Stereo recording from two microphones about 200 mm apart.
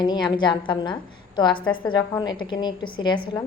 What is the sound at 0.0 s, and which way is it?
A woman's voice, 20° left (ahead or behind).